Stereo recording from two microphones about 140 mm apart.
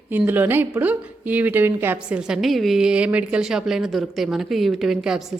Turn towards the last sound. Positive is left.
turn(degrees=-5)  # may be behind; listen again after turning